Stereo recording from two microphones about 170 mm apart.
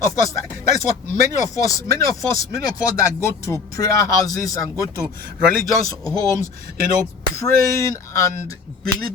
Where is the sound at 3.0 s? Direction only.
15° left (ahead or behind).